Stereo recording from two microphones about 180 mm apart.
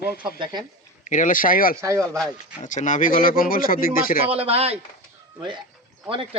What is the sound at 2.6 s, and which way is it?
Speech, 45° left (ahead or behind).